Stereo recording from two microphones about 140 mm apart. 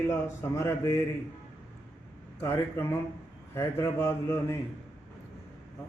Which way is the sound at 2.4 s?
15° left (ahead or behind).